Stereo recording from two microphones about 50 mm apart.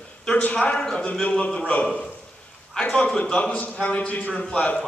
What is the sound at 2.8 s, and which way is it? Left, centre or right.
Speech, left.